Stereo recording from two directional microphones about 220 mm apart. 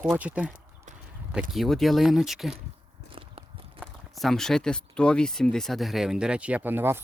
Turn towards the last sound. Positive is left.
turn(degrees=-10)  # may be behind; listen again after turning